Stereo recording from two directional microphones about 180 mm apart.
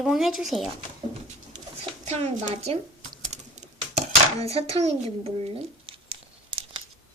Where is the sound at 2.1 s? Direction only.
35° right (ahead or behind).